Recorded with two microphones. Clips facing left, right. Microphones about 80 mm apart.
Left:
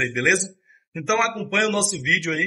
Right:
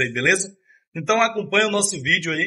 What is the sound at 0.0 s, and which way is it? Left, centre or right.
A man's voice, centre.